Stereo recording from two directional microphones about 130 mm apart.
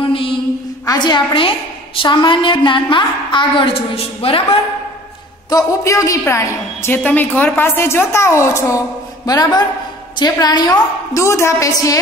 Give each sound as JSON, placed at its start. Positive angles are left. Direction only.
{"t": 0.0, "sound": "a sound", "side_deg": 45}
{"t": 0.8, "sound": "a woman's voice", "side_deg": 35}
{"t": 5.5, "sound": "a woman's voice", "side_deg": 25}